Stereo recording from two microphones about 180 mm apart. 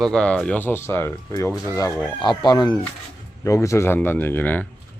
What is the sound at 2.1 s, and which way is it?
Chicken, 25° left (ahead or behind).